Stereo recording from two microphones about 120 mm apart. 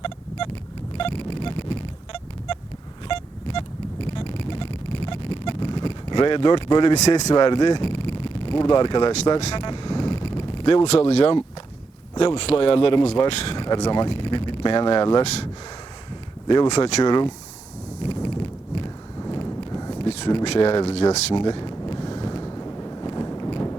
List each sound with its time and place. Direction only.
0.0 s vehicle: 45° left (ahead or behind)
0.9 s a sound: 50° left (ahead or behind)
7.3 s speech: 40° left (ahead or behind)
9.6 s vehicle: 40° left (ahead or behind)
10.9 s speech: 60° left (ahead or behind); by 15.2 s 45° left (ahead or behind)
16.6 s speech: 65° left (ahead or behind)
17.0 s speech: 35° left (ahead or behind)
18.0 s clip-clop: 40° left (ahead or behind)
19.2 s horse: 40° left (ahead or behind)
19.5 s a sound: 30° left (ahead or behind)
20.4 s speech: 50° left (ahead or behind)
21.3 s wind: 40° left (ahead or behind)